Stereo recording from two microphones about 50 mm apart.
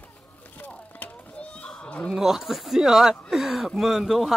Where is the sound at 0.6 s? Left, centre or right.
Left.